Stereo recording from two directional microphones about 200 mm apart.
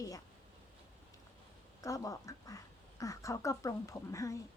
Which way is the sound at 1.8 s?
15° left (ahead or behind).